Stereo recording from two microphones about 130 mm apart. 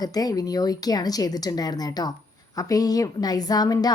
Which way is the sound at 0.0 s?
30° left (ahead or behind).